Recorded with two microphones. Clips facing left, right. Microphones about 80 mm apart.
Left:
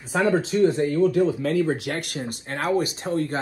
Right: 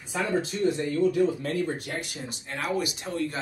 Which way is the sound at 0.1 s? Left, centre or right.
Left.